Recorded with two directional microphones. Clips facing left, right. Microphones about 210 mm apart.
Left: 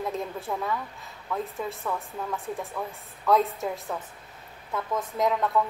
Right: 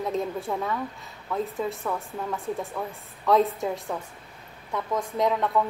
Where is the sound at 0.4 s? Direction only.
Centre (ahead or behind).